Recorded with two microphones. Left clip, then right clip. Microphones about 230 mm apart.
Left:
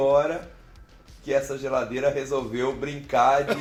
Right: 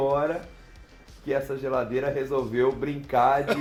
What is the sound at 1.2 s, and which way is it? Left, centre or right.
A man's voice, centre.